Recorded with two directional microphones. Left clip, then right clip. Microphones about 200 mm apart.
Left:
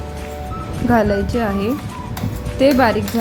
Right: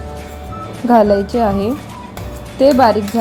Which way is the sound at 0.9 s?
10° right (ahead or behind).